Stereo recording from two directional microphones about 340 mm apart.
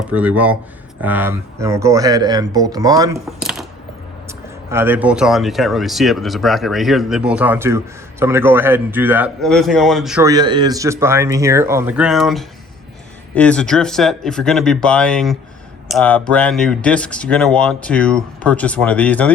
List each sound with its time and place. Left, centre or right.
0.1 s a man's voice: centre
4.7 s a man's voice: centre